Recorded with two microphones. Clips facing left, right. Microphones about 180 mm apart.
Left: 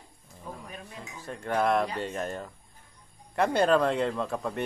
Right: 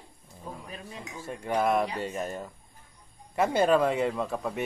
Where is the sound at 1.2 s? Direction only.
5° right (ahead or behind).